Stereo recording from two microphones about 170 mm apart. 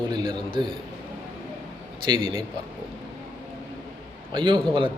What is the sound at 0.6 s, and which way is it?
Speech, 25° right (ahead or behind).